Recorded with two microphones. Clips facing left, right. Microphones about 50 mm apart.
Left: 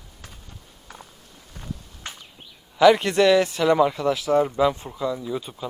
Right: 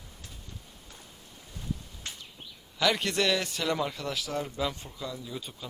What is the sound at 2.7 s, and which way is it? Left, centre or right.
Speech, left.